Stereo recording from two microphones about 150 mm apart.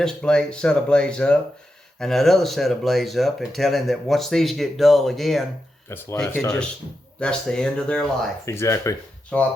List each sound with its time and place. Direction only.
0.0 s speech: 5° left (ahead or behind)
5.9 s speech: 15° left (ahead or behind)
6.4 s speech: centre (ahead or behind)
8.4 s speech: 20° left (ahead or behind)
9.3 s speech: 5° left (ahead or behind)